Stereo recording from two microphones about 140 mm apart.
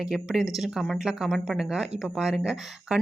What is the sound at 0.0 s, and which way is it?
Speech, 5° right (ahead or behind).